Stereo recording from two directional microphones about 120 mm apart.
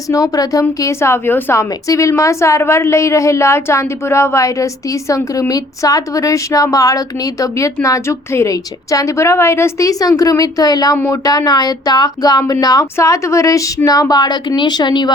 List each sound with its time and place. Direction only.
0.1 s a woman's voice: 30° left (ahead or behind)
10.9 s a woman's voice: 20° left (ahead or behind)
11.3 s speech: 35° left (ahead or behind)